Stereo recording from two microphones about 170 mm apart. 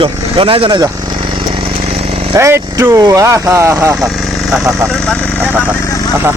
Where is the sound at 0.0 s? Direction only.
30° right (ahead or behind).